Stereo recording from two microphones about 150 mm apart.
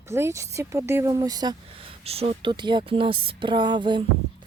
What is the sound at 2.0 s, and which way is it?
Speech, 40° right (ahead or behind).